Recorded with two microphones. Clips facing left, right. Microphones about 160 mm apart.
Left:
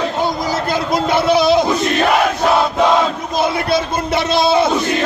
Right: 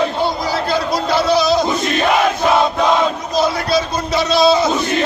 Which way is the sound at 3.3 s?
55° left (ahead or behind).